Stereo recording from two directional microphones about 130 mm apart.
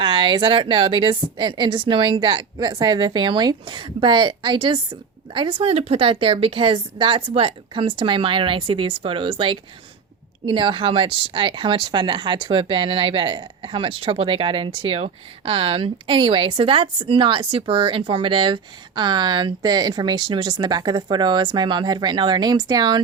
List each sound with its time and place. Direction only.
0.0 s a woman's voice: 40° right (ahead or behind)
10.4 s speech: 40° right (ahead or behind)